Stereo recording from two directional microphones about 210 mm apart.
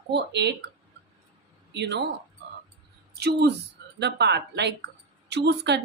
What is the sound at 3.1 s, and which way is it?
Speech, 50° right (ahead or behind).